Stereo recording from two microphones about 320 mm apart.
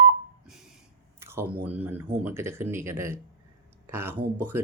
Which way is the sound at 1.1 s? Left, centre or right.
Centre.